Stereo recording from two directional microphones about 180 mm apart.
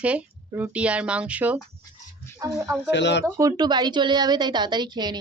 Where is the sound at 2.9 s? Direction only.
75° left (ahead or behind).